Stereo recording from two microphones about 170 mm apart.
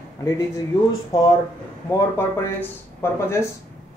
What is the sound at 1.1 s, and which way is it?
A man's voice, 20° left (ahead or behind).